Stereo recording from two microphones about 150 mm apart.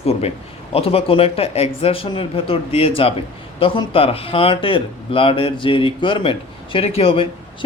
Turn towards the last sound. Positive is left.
turn(degrees=40)  # may be behind; listen again after turning